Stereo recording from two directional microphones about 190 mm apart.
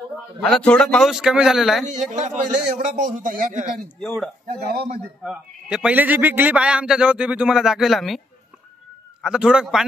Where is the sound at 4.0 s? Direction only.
Centre (ahead or behind).